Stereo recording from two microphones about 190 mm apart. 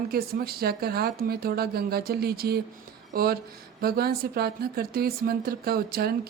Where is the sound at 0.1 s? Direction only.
50° right (ahead or behind).